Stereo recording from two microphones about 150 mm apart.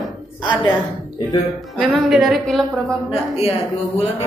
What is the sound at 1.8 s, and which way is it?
A woman's voice, centre (ahead or behind).